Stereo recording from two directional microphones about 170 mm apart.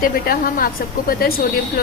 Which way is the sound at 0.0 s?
55° left (ahead or behind).